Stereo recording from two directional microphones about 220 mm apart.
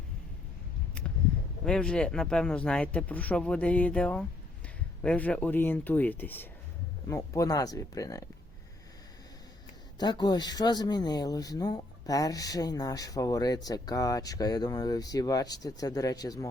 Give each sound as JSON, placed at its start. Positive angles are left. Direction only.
{"t": 1.6, "sound": "speech", "side_deg": 5}
{"t": 10.0, "sound": "speech", "side_deg": 20}